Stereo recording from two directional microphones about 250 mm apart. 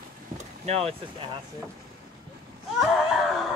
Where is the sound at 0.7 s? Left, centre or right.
Right.